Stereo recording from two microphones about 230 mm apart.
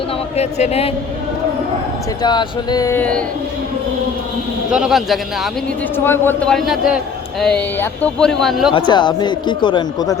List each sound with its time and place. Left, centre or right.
0.3 s speech: left
2.2 s speech: centre
4.7 s speech: centre
8.7 s speech: centre